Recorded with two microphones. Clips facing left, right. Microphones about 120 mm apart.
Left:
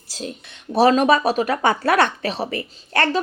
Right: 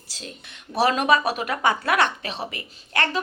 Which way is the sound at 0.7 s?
30° left (ahead or behind).